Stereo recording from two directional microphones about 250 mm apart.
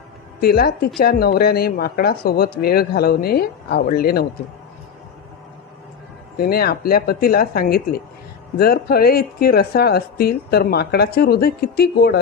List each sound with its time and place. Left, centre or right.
0.4 s speech: left
6.4 s speech: left